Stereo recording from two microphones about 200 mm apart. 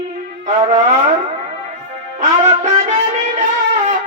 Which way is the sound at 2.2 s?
35° right (ahead or behind).